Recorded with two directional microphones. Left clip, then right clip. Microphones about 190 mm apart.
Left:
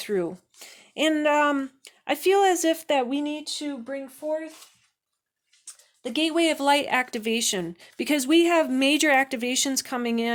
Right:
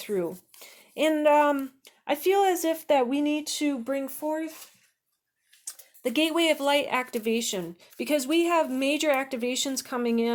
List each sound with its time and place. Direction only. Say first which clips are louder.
0.0 s speech: left 2 dB; 30° left (ahead or behind); by 3.3 s 5° left (ahead or behind)
3.4 s speech: right 3 dB; 20° right (ahead or behind)
3.8 s speech: right 1 dB; 35° right (ahead or behind)
6.0 s speech: right 1 dB; centre (ahead or behind)
6.2 s speech: left 3 dB; 25° left (ahead or behind)